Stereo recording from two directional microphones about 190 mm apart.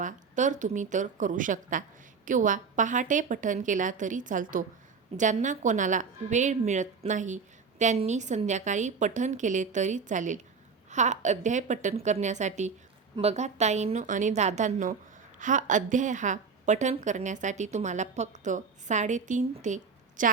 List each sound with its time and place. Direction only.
0.0 s a woman's voice: 40° right (ahead or behind)